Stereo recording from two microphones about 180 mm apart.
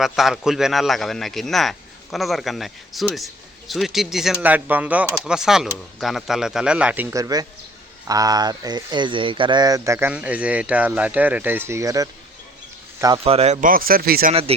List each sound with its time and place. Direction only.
0.0 s speech: centre (ahead or behind); by 12.0 s 20° right (ahead or behind)
13.2 s speech: 35° right (ahead or behind); by 14.3 s 55° right (ahead or behind)